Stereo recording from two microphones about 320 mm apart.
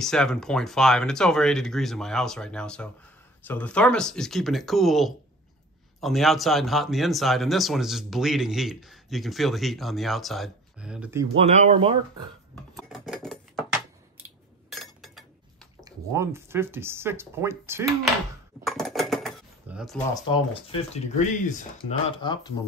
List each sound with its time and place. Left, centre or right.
0.0 s speech: centre
11.3 s speech: centre
12.7 s a sound: centre
14.7 s chink: centre
15.8 s speech: centre
18.6 s a sound: centre
20.2 s speech: centre